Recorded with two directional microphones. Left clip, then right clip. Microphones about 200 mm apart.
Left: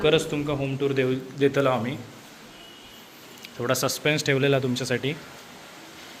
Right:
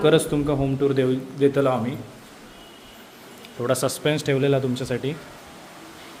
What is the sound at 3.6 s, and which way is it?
Speech, 10° right (ahead or behind).